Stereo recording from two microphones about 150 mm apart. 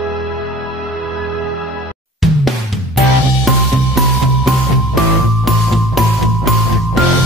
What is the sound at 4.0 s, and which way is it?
Music, centre (ahead or behind).